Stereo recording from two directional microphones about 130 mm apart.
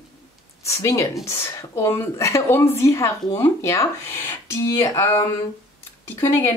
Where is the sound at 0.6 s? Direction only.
25° left (ahead or behind).